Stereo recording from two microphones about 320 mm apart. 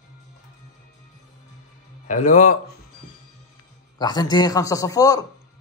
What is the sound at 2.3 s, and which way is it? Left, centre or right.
Speech, left.